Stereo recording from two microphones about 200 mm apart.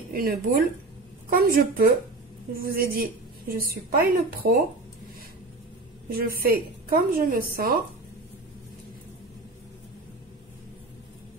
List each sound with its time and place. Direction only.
0.1 s a woman's voice: 45° right (ahead or behind)
6.0 s a woman's voice: 50° right (ahead or behind)